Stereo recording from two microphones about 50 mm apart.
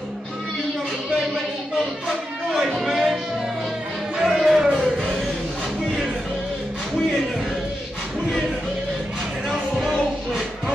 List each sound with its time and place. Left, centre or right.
2.0 s music: centre
4.2 s music: centre
9.5 s music: centre